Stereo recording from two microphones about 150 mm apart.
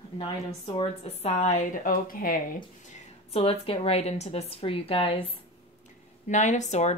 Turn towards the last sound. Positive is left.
turn(degrees=50)  # may be behind; listen again after turning